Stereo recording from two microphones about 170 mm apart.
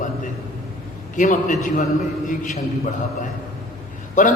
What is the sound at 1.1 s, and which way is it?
A man's voice, 50° left (ahead or behind).